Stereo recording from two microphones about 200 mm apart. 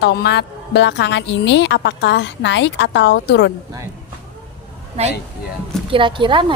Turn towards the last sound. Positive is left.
turn(degrees=-25)  # may be behind; listen again after turning